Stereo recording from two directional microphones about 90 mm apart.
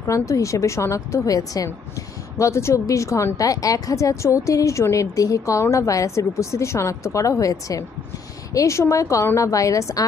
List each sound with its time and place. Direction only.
0.0 s a woman's voice: 35° left (ahead or behind)